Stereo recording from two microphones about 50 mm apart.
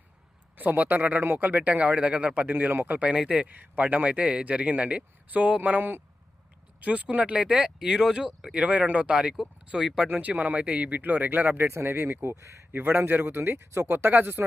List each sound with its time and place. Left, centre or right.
0.5 s a man's voice: right
2.5 s speech: right
3.0 s a man's voice: centre
3.4 s a man's voice: right; by 8.3 s centre
8.5 s a man's voice: right
9.7 s speech: centre
10.1 s speech: right
11.7 s speech: right
12.7 s speech: right
13.7 s speech: right
13.9 s speech: right